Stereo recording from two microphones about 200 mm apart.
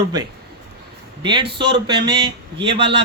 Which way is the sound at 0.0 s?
20° right (ahead or behind).